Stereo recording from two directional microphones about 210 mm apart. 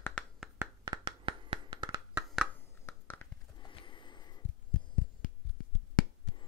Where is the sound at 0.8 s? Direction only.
20° right (ahead or behind).